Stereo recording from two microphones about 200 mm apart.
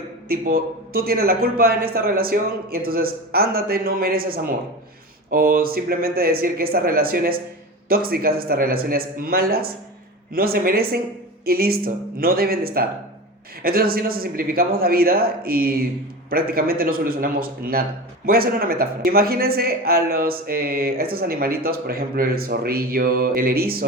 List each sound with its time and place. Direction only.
0.3 s speech: 45° right (ahead or behind)